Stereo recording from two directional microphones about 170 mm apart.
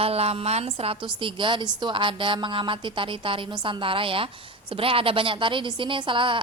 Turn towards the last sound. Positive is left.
turn(degrees=-30)  # may be behind; listen again after turning